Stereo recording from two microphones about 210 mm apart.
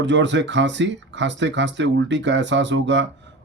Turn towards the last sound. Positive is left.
turn(degrees=-60)  # may be behind; listen again after turning